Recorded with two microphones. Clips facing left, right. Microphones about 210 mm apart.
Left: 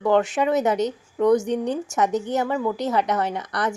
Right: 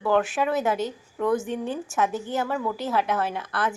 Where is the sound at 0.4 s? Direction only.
20° left (ahead or behind).